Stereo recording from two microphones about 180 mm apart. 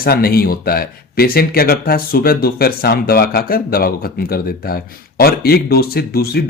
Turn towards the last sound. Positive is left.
turn(degrees=60)  # may be behind; listen again after turning